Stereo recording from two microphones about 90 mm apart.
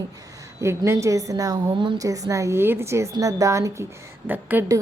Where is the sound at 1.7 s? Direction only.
65° right (ahead or behind).